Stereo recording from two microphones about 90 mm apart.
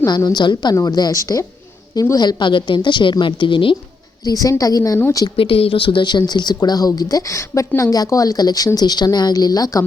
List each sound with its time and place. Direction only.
0.0 s a woman's voice: 45° left (ahead or behind)
2.4 s a woman's voice: 65° left (ahead or behind)
4.2 s a woman's voice: 40° left (ahead or behind)
5.4 s speech: 90° left; by 9.8 s 45° left (ahead or behind)